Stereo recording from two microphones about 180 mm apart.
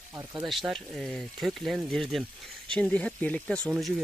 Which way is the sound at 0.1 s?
15° right (ahead or behind).